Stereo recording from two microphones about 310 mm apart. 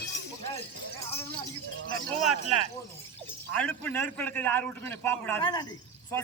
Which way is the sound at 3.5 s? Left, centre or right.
Centre.